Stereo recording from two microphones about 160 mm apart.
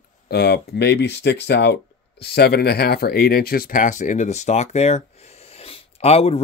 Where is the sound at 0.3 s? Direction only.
90° left.